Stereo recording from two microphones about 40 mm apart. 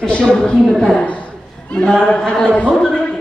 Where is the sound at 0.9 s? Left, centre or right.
Left.